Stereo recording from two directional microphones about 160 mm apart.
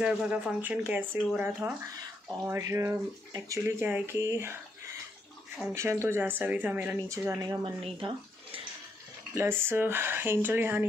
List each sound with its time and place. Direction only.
0.0 s speech: 10° right (ahead or behind)
5.7 s speech: 15° right (ahead or behind)
7.8 s speech: 35° right (ahead or behind)
9.3 s speech: 15° right (ahead or behind)